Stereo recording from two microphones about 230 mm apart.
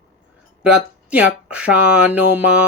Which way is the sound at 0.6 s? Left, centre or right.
Centre.